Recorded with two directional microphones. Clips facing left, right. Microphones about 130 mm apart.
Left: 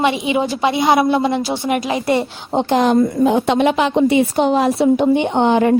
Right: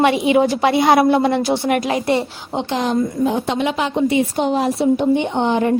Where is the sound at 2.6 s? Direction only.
50° left (ahead or behind).